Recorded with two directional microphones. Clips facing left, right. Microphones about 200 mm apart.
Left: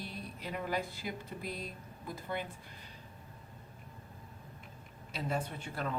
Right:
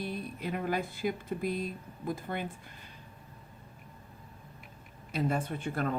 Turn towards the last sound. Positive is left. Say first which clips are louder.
# right 6 dB
turn(degrees=-50)  # may be behind; listen again after turning